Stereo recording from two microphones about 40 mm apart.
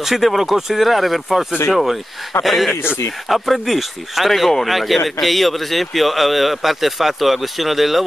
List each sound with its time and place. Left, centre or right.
0.0 s speech: centre